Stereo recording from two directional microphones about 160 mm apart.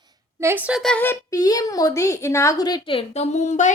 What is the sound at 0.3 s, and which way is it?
Speech, 15° right (ahead or behind).